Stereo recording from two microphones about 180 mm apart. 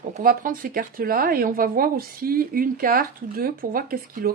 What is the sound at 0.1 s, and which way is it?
A woman's voice, 45° right (ahead or behind).